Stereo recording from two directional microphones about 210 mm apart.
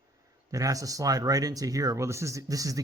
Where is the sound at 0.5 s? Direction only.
15° right (ahead or behind).